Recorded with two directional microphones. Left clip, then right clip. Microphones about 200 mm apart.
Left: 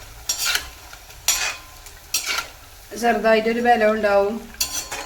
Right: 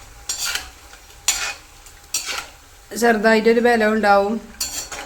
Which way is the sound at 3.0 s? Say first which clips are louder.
Right 2 dB; 50° right (ahead or behind).